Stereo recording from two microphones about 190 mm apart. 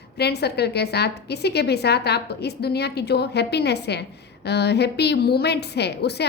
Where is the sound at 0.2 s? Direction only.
60° left (ahead or behind).